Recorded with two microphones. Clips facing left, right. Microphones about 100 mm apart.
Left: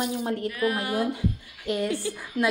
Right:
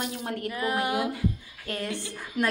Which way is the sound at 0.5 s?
25° right (ahead or behind).